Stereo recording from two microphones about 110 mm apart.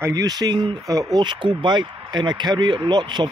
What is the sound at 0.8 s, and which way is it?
Speech, 30° right (ahead or behind).